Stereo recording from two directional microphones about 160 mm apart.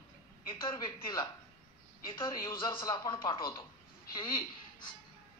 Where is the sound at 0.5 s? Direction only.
30° left (ahead or behind).